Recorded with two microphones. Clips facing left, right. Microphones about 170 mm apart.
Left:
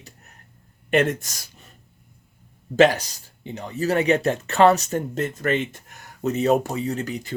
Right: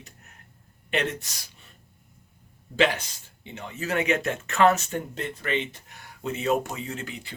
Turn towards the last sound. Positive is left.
turn(degrees=40)  # may be behind; listen again after turning